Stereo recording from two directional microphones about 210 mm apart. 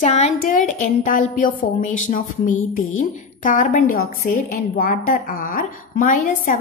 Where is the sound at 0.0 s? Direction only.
35° left (ahead or behind).